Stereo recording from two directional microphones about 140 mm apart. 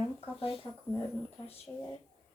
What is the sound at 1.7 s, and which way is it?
Speech, 15° left (ahead or behind).